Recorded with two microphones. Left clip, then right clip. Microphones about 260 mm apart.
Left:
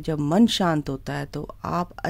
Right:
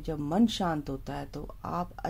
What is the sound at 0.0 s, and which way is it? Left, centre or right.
Speech, left.